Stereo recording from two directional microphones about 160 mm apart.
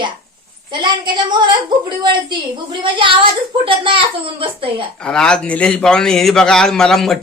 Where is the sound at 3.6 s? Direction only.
35° right (ahead or behind).